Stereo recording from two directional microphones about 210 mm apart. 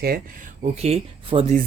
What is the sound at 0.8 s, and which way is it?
Speech, 30° right (ahead or behind).